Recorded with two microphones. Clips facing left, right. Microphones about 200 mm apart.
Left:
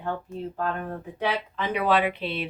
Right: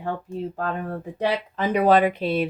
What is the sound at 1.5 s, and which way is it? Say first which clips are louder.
Speech: right 7 dB; 45° right (ahead or behind).